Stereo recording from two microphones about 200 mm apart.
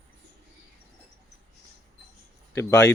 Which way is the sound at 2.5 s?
15° left (ahead or behind).